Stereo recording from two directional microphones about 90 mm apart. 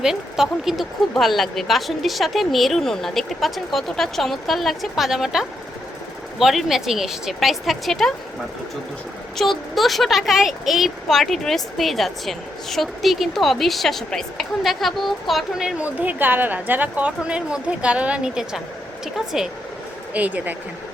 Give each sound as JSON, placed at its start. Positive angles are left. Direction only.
{"t": 0.0, "sound": "speech", "side_deg": -5}
{"t": 9.4, "sound": "speech", "side_deg": 0}
{"t": 15.8, "sound": "a woman's voice", "side_deg": -20}
{"t": 20.1, "sound": "speech", "side_deg": -15}